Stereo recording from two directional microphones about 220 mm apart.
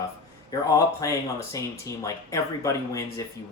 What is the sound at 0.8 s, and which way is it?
Speech, 15° left (ahead or behind).